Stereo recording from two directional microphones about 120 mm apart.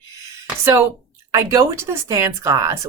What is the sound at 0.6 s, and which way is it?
Speech, 20° right (ahead or behind).